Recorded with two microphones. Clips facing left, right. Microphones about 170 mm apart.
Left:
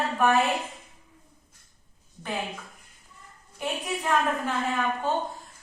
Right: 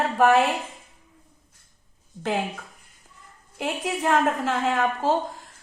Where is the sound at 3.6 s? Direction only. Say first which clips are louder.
Right 4 dB; 90° right.